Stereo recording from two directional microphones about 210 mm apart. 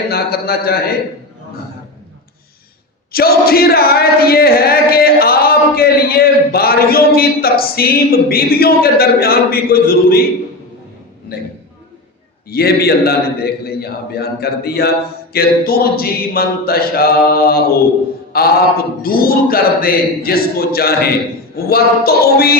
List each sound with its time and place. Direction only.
0.1 s mantra: 50° left (ahead or behind)
3.1 s speech: 45° left (ahead or behind)
12.5 s mantra: 50° left (ahead or behind)